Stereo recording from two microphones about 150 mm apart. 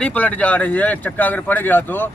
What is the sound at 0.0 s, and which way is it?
Speech, 10° left (ahead or behind).